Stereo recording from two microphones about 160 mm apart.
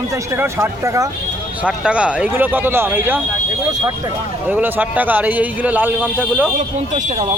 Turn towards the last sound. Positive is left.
turn(degrees=-10)  # may be behind; listen again after turning